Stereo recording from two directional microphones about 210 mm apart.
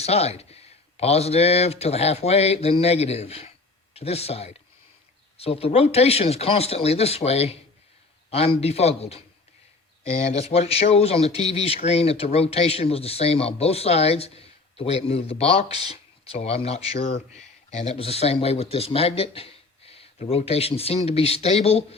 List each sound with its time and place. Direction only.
0.0 s speech: 30° left (ahead or behind)